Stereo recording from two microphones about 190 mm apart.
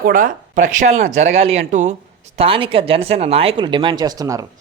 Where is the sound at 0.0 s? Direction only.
45° right (ahead or behind); by 4.4 s 20° right (ahead or behind).